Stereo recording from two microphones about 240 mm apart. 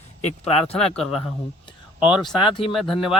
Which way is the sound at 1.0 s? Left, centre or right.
Centre.